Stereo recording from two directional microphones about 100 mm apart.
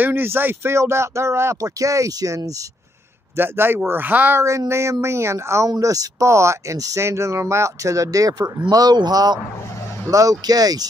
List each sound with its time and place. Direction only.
0.0 s speech: 20° right (ahead or behind)
3.3 s speech: 20° right (ahead or behind); by 10.9 s 40° right (ahead or behind)